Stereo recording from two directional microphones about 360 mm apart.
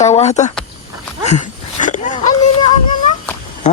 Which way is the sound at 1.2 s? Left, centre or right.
Centre.